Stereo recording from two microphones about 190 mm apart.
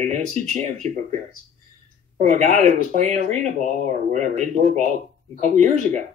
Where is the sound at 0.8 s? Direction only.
35° right (ahead or behind).